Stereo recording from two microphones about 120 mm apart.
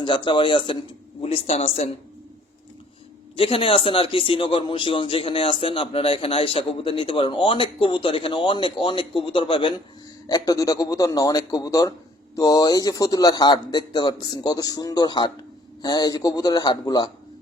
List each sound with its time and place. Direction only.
0.0 s a man's voice: 45° left (ahead or behind)
1.2 s a woman's voice: 55° left (ahead or behind)
3.3 s a man's voice: 50° left (ahead or behind)
10.2 s speech: 35° left (ahead or behind)